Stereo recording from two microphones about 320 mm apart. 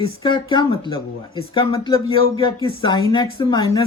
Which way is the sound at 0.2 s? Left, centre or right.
Centre.